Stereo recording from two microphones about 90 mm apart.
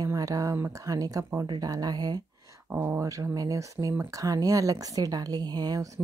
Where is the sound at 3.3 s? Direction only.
40° right (ahead or behind).